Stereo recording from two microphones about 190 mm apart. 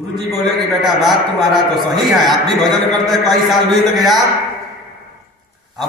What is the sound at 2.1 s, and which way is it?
A man's voice, centre (ahead or behind).